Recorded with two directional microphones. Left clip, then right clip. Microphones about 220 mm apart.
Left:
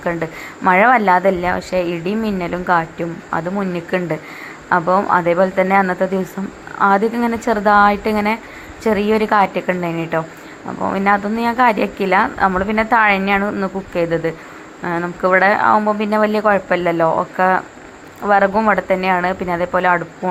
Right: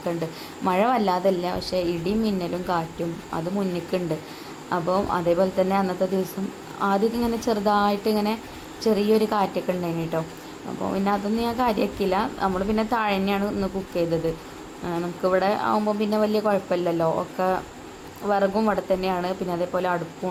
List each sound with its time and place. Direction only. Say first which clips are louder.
0.0 s a woman's voice: left 7 dB; 15° left (ahead or behind)
3.9 s a woman's voice: left 8 dB; 15° left (ahead or behind)
4.9 s speech: left 7 dB; 35° left (ahead or behind)
5.1 s a woman's voice: left 6 dB; 15° left (ahead or behind)